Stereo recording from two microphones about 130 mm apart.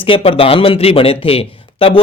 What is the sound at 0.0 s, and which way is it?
A man's voice, 45° left (ahead or behind).